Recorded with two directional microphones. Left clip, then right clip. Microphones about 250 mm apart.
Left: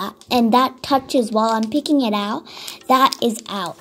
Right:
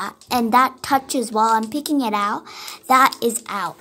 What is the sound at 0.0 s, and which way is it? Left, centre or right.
A woman's voice, left.